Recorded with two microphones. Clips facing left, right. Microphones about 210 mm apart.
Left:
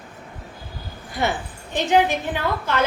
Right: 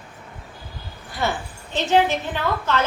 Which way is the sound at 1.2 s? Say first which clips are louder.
Left 1 dB; 15° left (ahead or behind).